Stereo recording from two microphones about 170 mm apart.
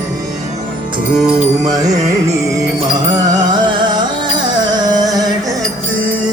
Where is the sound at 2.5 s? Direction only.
25° right (ahead or behind).